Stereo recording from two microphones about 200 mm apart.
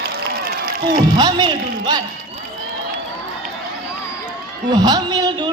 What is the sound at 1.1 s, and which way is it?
Speech, 20° right (ahead or behind).